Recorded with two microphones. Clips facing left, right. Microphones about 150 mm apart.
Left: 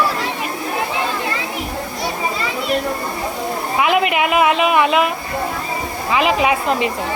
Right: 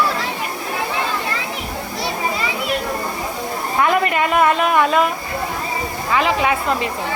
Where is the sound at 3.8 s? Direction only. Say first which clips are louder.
Left 1 dB; 10° left (ahead or behind).